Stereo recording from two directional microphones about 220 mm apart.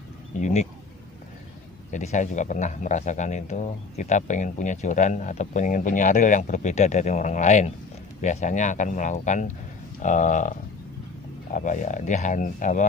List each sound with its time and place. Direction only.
0.4 s speech: 30° left (ahead or behind)
1.9 s speech: 35° left (ahead or behind)
11.5 s speech: 35° left (ahead or behind)